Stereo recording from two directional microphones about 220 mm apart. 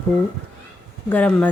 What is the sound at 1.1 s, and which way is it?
Speech, 5° left (ahead or behind).